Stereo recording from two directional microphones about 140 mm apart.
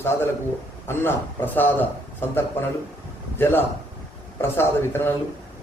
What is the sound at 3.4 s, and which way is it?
A man's voice, 15° left (ahead or behind).